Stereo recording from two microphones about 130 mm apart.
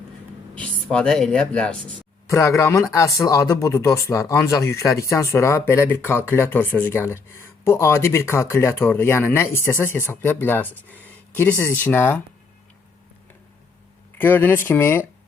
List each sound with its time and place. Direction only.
0.5 s speech: 10° left (ahead or behind)
2.2 s speech: 25° left (ahead or behind)
14.2 s speech: 15° left (ahead or behind)